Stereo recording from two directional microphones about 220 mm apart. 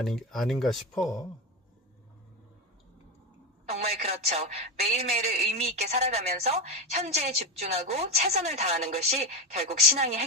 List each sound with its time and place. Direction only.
0.0 s speech: centre (ahead or behind)
3.7 s a woman's voice: 30° right (ahead or behind)